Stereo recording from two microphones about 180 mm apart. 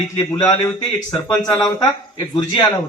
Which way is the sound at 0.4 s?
25° left (ahead or behind).